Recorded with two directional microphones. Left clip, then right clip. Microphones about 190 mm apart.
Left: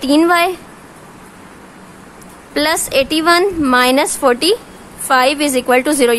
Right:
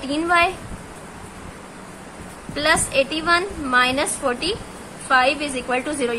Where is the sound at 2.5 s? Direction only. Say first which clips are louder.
Left 4 dB; 55° left (ahead or behind).